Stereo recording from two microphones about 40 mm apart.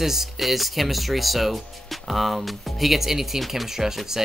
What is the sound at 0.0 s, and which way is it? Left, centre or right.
Speech, centre.